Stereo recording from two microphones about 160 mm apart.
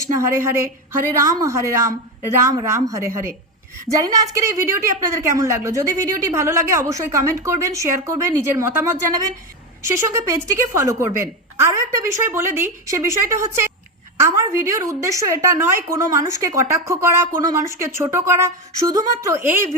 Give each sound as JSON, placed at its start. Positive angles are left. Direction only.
{"t": 0.0, "sound": "a woman's voice", "side_deg": -20}